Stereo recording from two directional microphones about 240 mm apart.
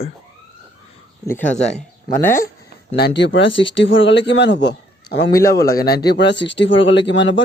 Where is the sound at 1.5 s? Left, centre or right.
Left.